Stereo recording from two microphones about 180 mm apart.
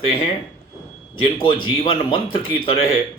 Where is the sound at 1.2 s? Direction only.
30° left (ahead or behind).